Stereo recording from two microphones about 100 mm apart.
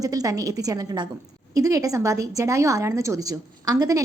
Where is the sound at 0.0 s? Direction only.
35° right (ahead or behind).